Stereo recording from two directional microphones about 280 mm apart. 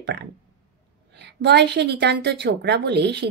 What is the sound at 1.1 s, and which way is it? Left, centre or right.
A woman's voice, right.